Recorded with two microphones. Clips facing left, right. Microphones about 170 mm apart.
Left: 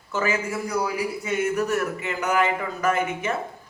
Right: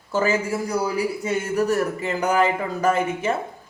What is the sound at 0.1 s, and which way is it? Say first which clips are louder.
Speech: right 4 dB; 35° right (ahead or behind).